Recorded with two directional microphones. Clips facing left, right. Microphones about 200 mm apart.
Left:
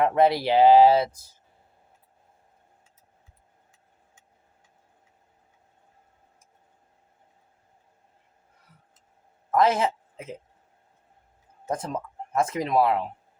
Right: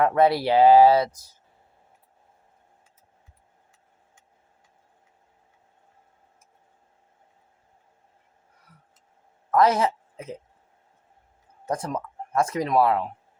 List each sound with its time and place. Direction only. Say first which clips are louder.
0.0 s speech: right 1 dB; 20° left (ahead or behind)
9.6 s speech: right 2 dB; 25° left (ahead or behind)
11.7 s speech: right 1 dB; 25° left (ahead or behind)